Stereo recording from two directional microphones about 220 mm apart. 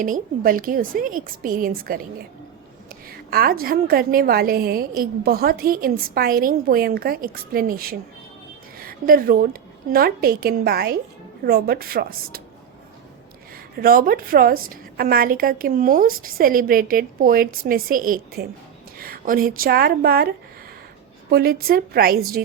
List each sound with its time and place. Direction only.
0.0 s a woman's voice: 40° right (ahead or behind)
3.1 s a woman's voice: 45° right (ahead or behind)
13.7 s a woman's voice: 40° right (ahead or behind)